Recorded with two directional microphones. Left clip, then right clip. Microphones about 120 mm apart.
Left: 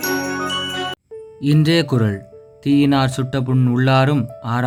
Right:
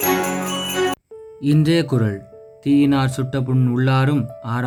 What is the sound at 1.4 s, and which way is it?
Speech, 35° left (ahead or behind).